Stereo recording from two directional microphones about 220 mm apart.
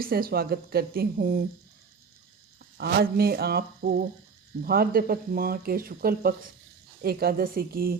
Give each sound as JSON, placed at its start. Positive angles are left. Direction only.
{"t": 0.0, "sound": "a woman's voice", "side_deg": -45}
{"t": 2.7, "sound": "a woman's voice", "side_deg": -45}